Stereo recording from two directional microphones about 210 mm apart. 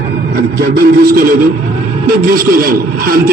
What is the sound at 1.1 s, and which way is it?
A man's voice, 45° right (ahead or behind).